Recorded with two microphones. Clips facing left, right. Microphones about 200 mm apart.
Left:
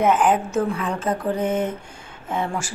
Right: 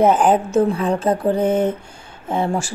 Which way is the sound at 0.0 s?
35° right (ahead or behind).